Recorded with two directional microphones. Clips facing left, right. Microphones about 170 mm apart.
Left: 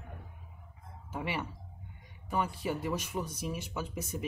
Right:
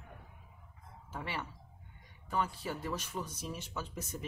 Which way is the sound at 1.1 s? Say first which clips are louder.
Left 5 dB; 15° left (ahead or behind).